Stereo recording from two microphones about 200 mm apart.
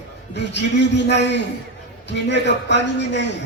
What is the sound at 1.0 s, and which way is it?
A man's voice, 60° left (ahead or behind).